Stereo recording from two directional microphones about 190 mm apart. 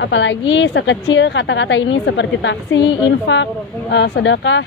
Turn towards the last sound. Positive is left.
turn(degrees=75)  # may be behind; listen again after turning